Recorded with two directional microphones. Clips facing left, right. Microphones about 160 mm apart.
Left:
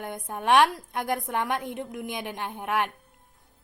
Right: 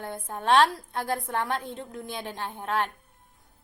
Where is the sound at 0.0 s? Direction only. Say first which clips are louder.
Left 1 dB; 15° left (ahead or behind).